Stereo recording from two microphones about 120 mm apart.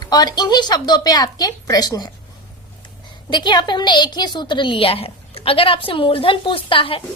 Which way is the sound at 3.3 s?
40° left (ahead or behind).